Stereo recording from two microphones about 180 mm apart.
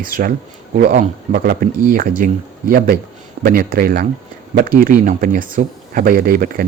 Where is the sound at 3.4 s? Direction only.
55° right (ahead or behind).